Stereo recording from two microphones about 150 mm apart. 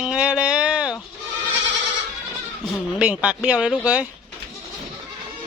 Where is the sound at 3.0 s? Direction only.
5° right (ahead or behind).